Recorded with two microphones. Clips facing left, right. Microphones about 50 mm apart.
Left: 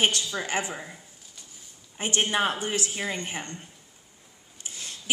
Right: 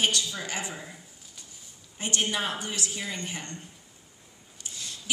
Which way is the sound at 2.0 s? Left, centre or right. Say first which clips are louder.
Left 4 dB; left.